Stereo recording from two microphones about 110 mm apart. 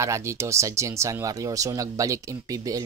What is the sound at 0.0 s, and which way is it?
Speech, 25° right (ahead or behind).